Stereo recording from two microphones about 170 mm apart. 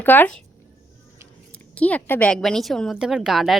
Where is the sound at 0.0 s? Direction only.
10° left (ahead or behind).